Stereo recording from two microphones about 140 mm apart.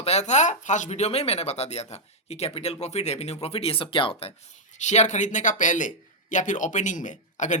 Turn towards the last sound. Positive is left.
turn(degrees=60)  # may be behind; listen again after turning